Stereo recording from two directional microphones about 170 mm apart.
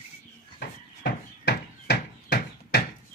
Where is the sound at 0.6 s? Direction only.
75° left (ahead or behind).